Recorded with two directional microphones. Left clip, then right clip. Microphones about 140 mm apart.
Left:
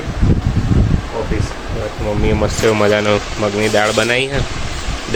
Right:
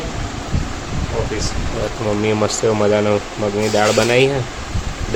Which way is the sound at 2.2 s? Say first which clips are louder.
Left 2 dB; centre (ahead or behind).